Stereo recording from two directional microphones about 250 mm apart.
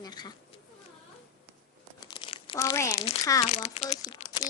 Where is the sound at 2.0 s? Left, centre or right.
Centre.